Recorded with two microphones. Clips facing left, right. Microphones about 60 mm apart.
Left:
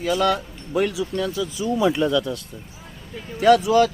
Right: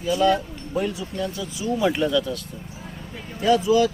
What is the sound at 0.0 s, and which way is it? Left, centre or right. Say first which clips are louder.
Speech: right 1 dB; left.